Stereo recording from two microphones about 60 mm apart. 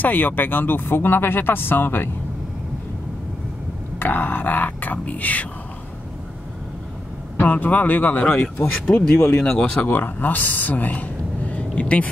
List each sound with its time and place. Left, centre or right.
0.0 s speech: left
4.0 s speech: left
7.3 s speech: left
9.0 s speech: centre
9.8 s speech: left